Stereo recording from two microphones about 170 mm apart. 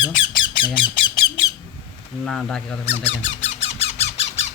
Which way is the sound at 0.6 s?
30° left (ahead or behind).